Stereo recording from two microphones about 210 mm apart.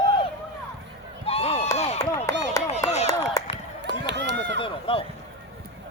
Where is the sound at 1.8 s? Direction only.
30° left (ahead or behind).